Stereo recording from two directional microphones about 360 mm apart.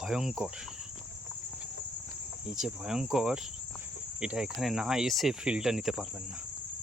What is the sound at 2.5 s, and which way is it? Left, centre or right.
Speech, centre.